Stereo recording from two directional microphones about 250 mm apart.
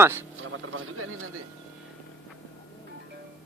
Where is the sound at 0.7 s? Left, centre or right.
Right.